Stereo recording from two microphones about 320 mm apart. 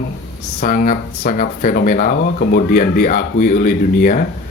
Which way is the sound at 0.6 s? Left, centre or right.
Left.